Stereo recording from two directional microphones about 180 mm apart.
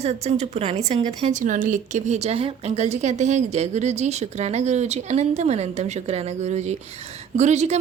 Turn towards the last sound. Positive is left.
turn(degrees=-40)  # may be behind; listen again after turning